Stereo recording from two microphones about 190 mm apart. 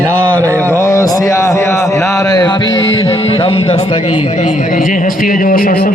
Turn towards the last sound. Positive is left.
turn(degrees=45)  # may be behind; listen again after turning